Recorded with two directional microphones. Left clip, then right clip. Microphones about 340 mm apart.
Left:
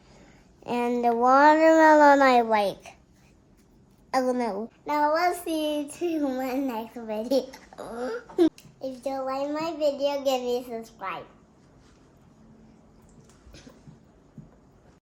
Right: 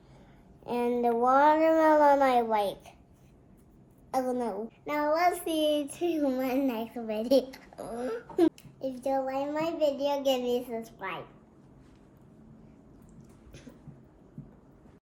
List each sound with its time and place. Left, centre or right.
0.6 s a child's voice: left
4.3 s a child's voice: left
4.9 s child singing: centre